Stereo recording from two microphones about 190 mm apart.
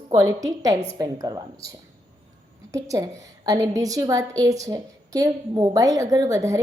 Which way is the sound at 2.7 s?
15° right (ahead or behind).